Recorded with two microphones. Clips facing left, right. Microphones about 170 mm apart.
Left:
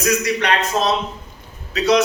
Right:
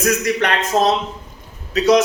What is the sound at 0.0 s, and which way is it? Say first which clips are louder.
A man's voice: right 1 dB; 50° right (ahead or behind).